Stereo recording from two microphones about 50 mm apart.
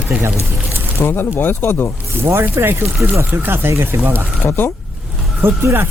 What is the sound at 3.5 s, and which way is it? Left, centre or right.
Speech, right.